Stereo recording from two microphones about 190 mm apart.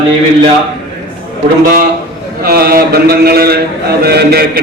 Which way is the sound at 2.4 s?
55° right (ahead or behind).